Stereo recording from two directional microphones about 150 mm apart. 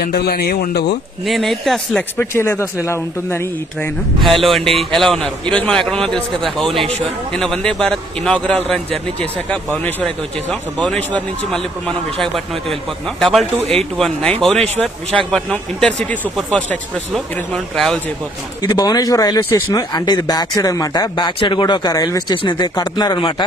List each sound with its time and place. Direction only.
0.0 s a man's voice: 90° left
1.2 s a man's voice: centre (ahead or behind)
2.1 s speech: 15° left (ahead or behind)
4.2 s a man's voice: centre (ahead or behind)
13.2 s a man's voice: centre (ahead or behind)
15.3 s a man's voice: 5° left (ahead or behind)
18.6 s speech: 25° left (ahead or behind)